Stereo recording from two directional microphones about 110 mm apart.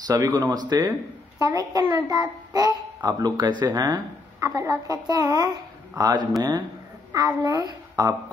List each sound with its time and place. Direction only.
0.1 s a woman's voice: 30° right (ahead or behind)